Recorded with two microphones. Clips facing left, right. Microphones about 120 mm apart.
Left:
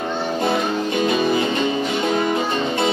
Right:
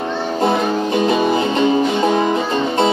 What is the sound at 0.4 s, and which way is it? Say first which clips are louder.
Music: right 5 dB; 30° right (ahead or behind).